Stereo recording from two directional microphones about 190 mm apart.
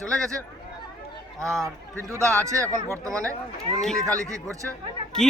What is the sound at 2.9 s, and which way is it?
Speech, 15° right (ahead or behind).